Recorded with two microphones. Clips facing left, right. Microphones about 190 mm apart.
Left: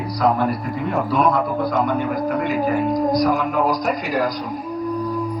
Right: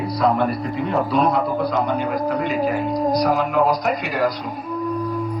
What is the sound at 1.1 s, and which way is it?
Speech, 50° left (ahead or behind).